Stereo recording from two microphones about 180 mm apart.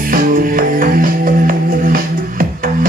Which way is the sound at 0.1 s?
50° right (ahead or behind).